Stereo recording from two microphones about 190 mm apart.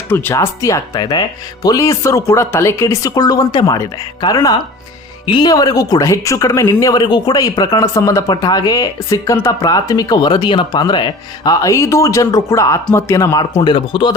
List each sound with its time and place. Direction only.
0.1 s speech: 15° left (ahead or behind)